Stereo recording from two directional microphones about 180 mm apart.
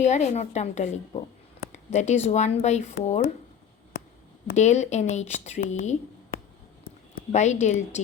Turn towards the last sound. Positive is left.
turn(degrees=40)  # may be behind; listen again after turning